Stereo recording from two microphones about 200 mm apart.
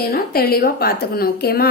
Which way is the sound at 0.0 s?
50° left (ahead or behind).